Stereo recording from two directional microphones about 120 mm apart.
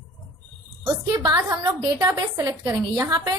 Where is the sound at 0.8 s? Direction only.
35° right (ahead or behind).